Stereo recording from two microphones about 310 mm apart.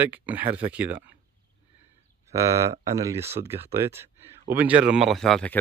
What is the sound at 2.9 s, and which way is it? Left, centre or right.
Speech, centre.